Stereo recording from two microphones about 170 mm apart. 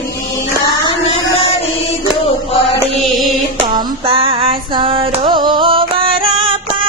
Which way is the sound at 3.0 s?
Centre (ahead or behind).